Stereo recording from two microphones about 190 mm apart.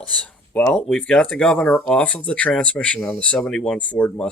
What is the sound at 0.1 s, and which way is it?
Speech, 5° left (ahead or behind).